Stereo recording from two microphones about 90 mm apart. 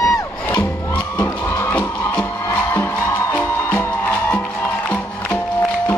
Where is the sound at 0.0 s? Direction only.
40° left (ahead or behind).